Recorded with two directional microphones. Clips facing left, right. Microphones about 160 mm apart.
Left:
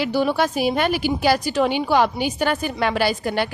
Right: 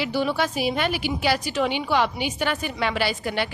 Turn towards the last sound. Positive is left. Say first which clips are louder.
# left 4 dB
turn(degrees=45)  # may be behind; listen again after turning